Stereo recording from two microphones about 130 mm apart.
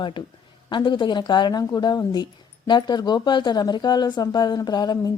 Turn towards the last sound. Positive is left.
turn(degrees=30)  # may be behind; listen again after turning